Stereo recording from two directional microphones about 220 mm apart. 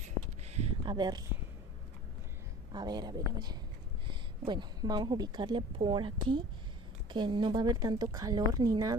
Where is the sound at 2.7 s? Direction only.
20° right (ahead or behind).